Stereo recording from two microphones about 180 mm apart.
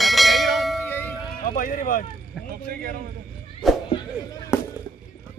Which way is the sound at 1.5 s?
50° left (ahead or behind).